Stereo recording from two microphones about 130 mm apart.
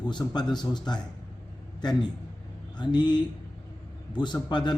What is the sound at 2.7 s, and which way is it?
Speech, 35° left (ahead or behind).